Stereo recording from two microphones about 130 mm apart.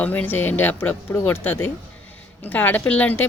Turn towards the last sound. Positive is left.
turn(degrees=10)  # may be behind; listen again after turning